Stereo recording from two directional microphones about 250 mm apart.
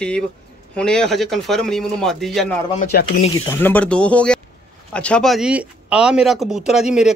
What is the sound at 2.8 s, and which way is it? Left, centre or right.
Speech, left.